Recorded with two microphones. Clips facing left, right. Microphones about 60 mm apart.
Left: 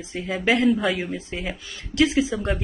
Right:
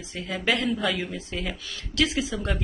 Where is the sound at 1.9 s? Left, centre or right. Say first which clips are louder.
Left 6 dB; left.